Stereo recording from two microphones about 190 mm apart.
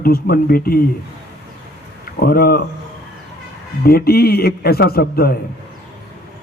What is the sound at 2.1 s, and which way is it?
Speech, 50° left (ahead or behind).